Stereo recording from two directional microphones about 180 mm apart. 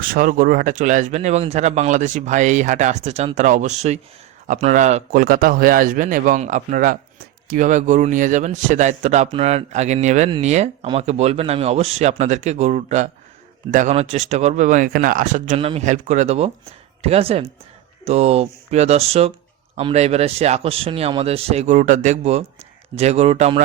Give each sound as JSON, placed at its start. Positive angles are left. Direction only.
{"t": 0.0, "sound": "a man's voice", "side_deg": -50}